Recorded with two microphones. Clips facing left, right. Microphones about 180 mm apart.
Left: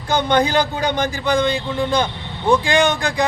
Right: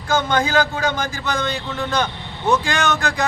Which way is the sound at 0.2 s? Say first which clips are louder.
Left 4 dB; 15° left (ahead or behind).